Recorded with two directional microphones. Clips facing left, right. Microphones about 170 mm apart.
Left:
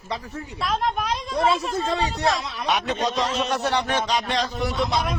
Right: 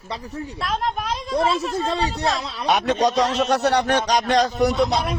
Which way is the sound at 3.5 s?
40° right (ahead or behind).